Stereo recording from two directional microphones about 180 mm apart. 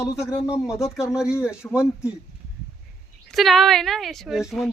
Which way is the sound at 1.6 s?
5° left (ahead or behind).